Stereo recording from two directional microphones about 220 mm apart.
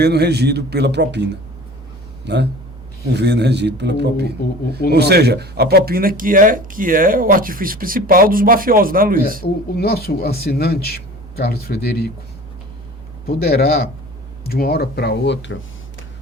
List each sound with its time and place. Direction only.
0.0 s speech: 50° right (ahead or behind)
9.4 s speech: 45° left (ahead or behind)
13.2 s speech: 45° left (ahead or behind)